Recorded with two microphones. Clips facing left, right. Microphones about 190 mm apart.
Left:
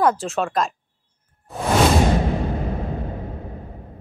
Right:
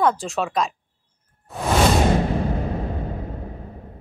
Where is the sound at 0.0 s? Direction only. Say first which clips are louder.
Left 1 dB; centre (ahead or behind).